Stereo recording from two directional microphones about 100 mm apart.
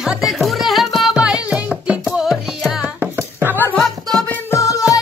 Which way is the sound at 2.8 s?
20° right (ahead or behind).